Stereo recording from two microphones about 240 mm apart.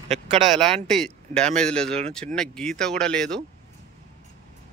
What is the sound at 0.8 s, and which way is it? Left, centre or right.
Speech, centre.